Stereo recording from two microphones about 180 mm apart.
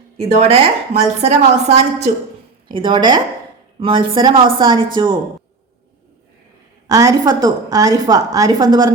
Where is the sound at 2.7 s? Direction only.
25° right (ahead or behind).